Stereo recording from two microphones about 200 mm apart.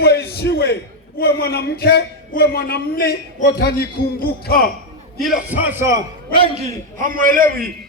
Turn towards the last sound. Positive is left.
turn(degrees=-45)  # may be behind; listen again after turning